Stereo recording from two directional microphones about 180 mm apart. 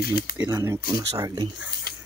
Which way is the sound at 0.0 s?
55° left (ahead or behind).